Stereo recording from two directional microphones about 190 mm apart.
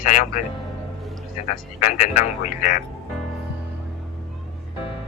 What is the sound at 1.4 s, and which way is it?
Speech, 40° left (ahead or behind).